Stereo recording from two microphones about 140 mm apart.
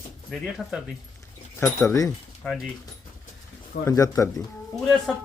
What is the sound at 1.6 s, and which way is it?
Speech, 20° left (ahead or behind).